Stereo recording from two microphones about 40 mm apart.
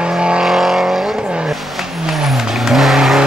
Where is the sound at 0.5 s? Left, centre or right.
Centre.